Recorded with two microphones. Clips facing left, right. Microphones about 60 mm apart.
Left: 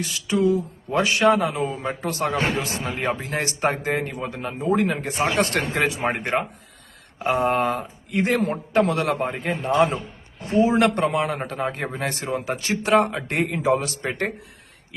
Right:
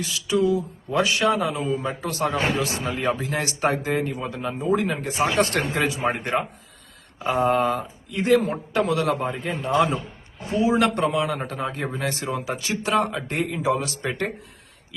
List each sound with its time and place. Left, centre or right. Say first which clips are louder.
0.0 s a man's voice: left 1 dB; left